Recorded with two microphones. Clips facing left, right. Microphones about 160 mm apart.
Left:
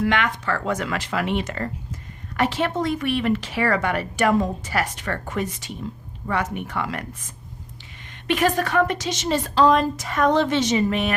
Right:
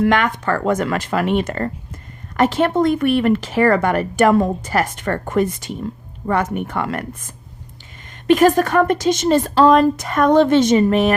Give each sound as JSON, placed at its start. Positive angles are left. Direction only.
{"t": 0.0, "sound": "speech", "side_deg": -45}
{"t": 8.3, "sound": "speech", "side_deg": -45}